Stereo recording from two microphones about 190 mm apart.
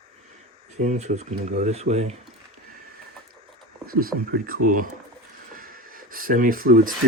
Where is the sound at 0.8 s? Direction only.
35° right (ahead or behind).